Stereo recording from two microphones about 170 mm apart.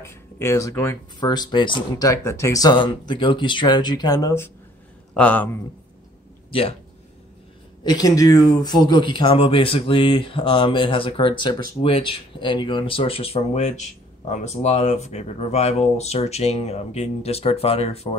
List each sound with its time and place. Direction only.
0.0 s speech: 15° left (ahead or behind)
5.1 s speech: 10° left (ahead or behind)
7.8 s speech: 20° left (ahead or behind)